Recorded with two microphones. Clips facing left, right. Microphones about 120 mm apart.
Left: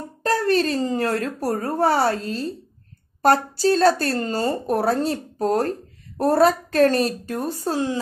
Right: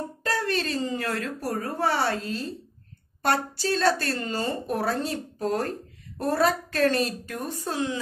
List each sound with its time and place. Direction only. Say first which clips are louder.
0.2 s a woman's voice: left 9 dB; 40° left (ahead or behind)